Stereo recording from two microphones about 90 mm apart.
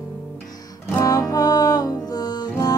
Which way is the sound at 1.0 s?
45° left (ahead or behind).